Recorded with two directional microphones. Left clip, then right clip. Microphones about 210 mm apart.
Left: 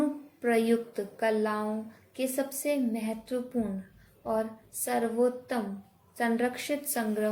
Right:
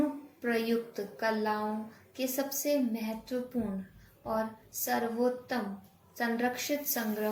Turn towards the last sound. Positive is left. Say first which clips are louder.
# left 3 dB
turn(degrees=50)  # may be behind; listen again after turning